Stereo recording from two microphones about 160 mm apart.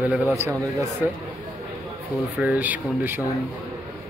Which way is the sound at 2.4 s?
10° right (ahead or behind).